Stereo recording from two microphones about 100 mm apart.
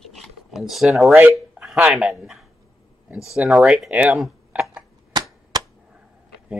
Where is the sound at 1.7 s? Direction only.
10° right (ahead or behind).